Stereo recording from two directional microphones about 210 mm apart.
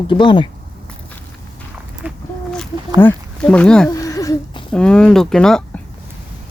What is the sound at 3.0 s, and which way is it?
Speech, 10° left (ahead or behind).